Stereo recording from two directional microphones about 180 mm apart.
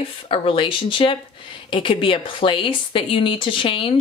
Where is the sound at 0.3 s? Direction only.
30° left (ahead or behind).